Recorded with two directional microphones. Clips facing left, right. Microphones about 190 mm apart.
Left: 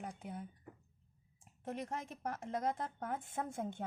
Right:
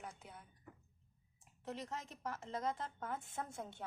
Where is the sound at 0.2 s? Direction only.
50° left (ahead or behind).